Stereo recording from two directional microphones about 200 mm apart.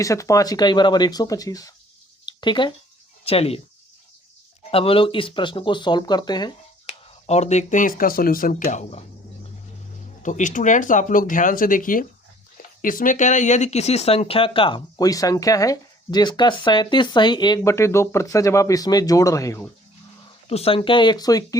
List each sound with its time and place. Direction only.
0.0 s speech: 15° left (ahead or behind)
2.2 s a sound: 25° left (ahead or behind)
3.2 s speech: 30° left (ahead or behind)
4.7 s speech: 30° left (ahead or behind)
7.3 s speech: 35° left (ahead or behind)
10.2 s speech: 40° left (ahead or behind); by 19.7 s 15° left (ahead or behind)
20.5 s speech: 30° left (ahead or behind)